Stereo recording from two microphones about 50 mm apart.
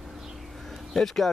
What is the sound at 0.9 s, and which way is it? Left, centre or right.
Speech, centre.